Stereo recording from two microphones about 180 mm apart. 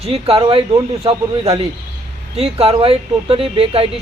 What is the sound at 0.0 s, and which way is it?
Speech, 35° right (ahead or behind).